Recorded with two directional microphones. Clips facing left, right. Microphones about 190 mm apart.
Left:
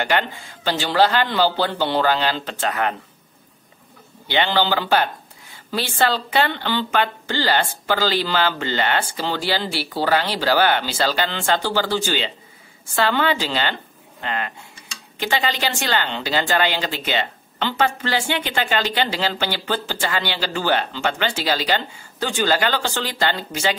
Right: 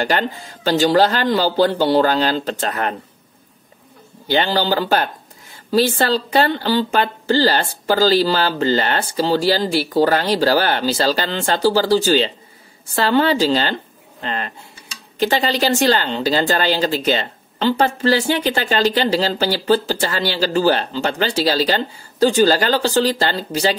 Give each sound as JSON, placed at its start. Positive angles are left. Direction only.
{"t": 0.0, "sound": "a woman's voice", "side_deg": -40}
{"t": 4.3, "sound": "a woman's voice", "side_deg": -40}